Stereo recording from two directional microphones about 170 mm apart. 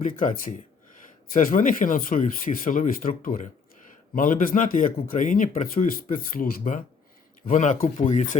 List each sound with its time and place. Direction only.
0.0 s speech: 50° left (ahead or behind)